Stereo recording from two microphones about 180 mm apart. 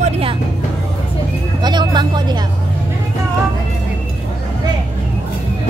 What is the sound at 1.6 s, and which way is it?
Vehicle, 25° right (ahead or behind).